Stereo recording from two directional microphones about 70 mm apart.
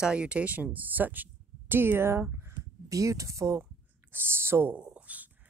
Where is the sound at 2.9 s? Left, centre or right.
Right.